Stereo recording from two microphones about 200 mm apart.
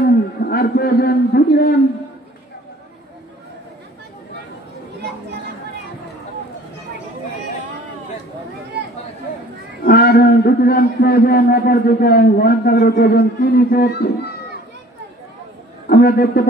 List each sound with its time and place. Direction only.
0.0 s a sound: 50° left (ahead or behind)
9.8 s a man's voice: 50° left (ahead or behind)
15.9 s a man's voice: 50° left (ahead or behind)